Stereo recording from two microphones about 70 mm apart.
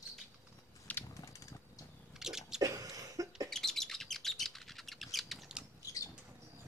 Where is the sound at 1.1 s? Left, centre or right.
Left.